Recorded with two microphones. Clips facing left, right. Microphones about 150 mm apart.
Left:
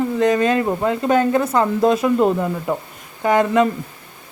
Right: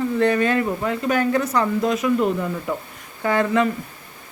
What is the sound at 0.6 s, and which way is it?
Speech, 30° left (ahead or behind).